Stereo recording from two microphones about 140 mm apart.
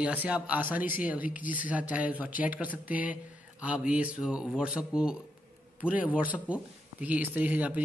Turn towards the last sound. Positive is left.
turn(degrees=-10)  # may be behind; listen again after turning